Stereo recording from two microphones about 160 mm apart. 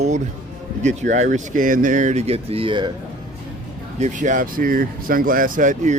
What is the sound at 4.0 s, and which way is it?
Speech, 50° right (ahead or behind).